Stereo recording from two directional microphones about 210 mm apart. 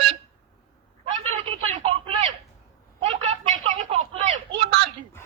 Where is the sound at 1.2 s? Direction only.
25° right (ahead or behind).